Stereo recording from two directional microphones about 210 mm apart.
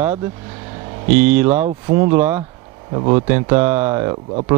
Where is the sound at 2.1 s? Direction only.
10° right (ahead or behind).